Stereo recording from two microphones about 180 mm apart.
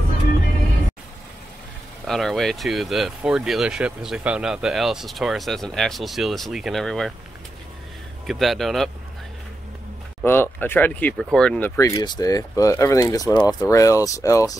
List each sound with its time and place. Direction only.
2.0 s speech: centre (ahead or behind)
8.3 s speech: centre (ahead or behind)
10.2 s speech: 10° left (ahead or behind)